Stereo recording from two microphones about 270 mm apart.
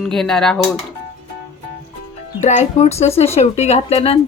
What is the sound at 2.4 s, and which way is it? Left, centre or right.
Speech, left.